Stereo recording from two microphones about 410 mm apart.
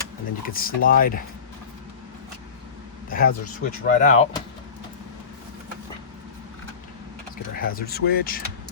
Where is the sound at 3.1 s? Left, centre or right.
Left.